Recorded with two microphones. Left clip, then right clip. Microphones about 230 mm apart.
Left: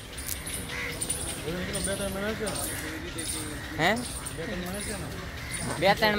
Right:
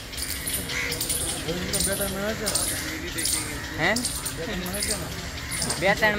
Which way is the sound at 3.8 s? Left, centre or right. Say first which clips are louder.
Right 1 dB; left.